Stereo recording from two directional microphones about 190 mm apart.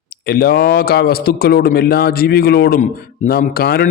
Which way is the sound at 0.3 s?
55° left (ahead or behind).